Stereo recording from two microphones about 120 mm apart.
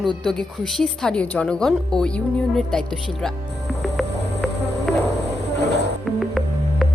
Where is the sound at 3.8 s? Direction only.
Centre (ahead or behind).